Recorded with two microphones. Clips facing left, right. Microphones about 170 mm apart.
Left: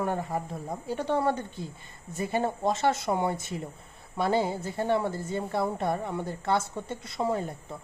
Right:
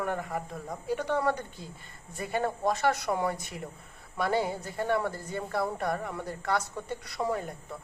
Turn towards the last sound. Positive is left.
turn(degrees=25)  # may be behind; listen again after turning